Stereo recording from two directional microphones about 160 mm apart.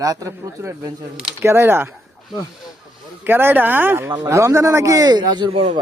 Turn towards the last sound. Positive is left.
turn(degrees=-35)  # may be behind; listen again after turning